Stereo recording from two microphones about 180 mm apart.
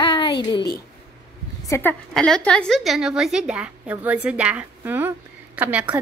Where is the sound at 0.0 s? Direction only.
25° left (ahead or behind).